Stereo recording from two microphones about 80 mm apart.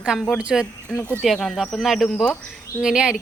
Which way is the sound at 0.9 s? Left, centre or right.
Left.